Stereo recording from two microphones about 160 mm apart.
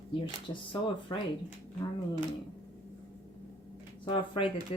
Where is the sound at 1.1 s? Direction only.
30° left (ahead or behind).